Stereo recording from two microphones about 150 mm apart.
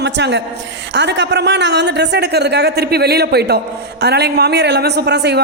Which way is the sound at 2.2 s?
90° right.